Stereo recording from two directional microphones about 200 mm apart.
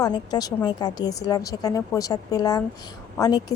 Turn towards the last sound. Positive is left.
turn(degrees=20)  # may be behind; listen again after turning